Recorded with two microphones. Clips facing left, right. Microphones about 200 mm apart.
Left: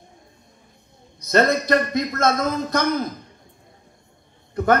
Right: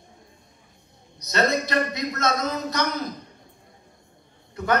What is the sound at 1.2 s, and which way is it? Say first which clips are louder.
A man's voice: left 5 dB; 50° left (ahead or behind).